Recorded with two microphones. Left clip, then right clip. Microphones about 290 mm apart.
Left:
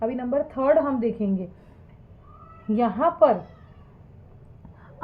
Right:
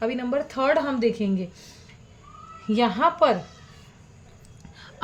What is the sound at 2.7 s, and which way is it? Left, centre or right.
Speech, right.